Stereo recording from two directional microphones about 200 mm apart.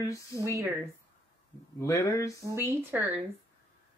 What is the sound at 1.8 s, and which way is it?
Speech, 15° left (ahead or behind).